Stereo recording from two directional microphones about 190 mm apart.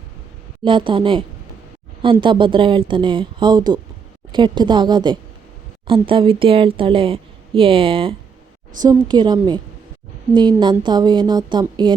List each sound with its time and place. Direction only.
0.6 s speech: 25° right (ahead or behind)